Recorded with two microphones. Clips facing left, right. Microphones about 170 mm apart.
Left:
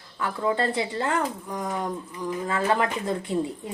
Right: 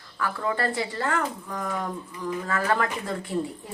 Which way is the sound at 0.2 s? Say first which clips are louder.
Left 2 dB; 20° left (ahead or behind).